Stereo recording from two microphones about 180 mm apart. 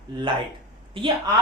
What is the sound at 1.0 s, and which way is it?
Speech, 30° right (ahead or behind).